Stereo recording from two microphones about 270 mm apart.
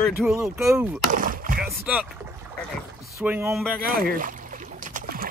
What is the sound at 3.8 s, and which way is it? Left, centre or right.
Boat, right.